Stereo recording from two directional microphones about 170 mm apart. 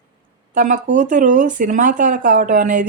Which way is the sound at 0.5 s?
50° right (ahead or behind).